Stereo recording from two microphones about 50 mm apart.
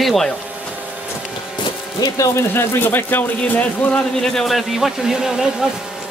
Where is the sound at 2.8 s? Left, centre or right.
Left.